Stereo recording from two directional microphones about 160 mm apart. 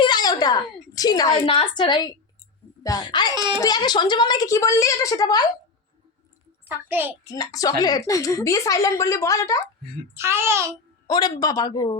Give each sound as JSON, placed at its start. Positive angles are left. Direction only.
{"t": 0.0, "sound": "a woman's voice", "side_deg": 25}
{"t": 3.3, "sound": "speech", "side_deg": -30}
{"t": 3.6, "sound": "a woman's voice", "side_deg": 25}
{"t": 6.7, "sound": "a child's voice", "side_deg": -10}
{"t": 7.3, "sound": "a woman's voice", "side_deg": 20}
{"t": 10.2, "sound": "a child's voice", "side_deg": -15}
{"t": 11.1, "sound": "a woman's voice", "side_deg": 25}